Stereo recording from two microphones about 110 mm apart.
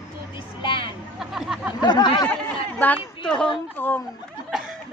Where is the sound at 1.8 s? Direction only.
45° left (ahead or behind).